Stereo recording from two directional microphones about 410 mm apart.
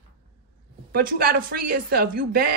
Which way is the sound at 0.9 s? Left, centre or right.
Right.